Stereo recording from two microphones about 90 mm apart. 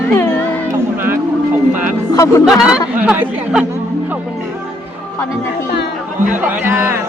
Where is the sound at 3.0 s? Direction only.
20° right (ahead or behind).